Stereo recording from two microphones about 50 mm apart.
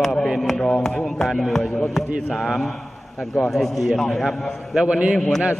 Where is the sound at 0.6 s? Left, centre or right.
Centre.